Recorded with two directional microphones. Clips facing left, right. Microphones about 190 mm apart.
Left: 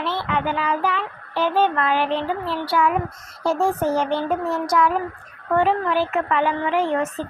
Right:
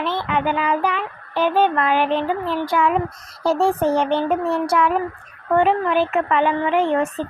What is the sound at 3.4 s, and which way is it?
Speech, 35° right (ahead or behind).